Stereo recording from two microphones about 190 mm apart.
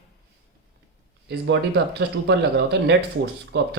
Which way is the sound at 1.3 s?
60° right (ahead or behind).